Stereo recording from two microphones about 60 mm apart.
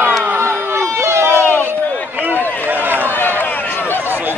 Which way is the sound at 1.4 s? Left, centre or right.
Left.